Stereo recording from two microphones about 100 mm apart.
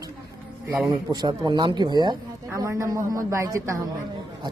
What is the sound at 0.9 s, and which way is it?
Speech, 45° right (ahead or behind).